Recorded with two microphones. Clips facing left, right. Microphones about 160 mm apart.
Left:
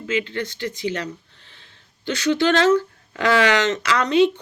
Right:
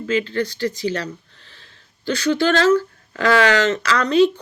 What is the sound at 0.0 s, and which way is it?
Speech, 20° left (ahead or behind).